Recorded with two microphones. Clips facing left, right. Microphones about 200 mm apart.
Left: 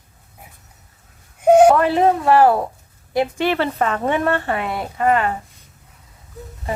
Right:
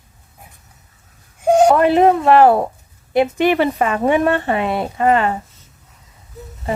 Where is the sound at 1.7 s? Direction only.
20° right (ahead or behind).